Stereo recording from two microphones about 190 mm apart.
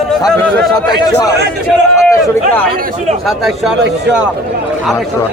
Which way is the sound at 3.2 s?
Centre (ahead or behind).